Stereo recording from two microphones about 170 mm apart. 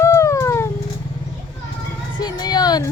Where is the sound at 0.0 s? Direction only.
15° left (ahead or behind).